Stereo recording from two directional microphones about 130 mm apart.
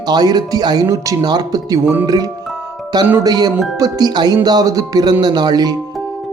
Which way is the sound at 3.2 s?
30° right (ahead or behind).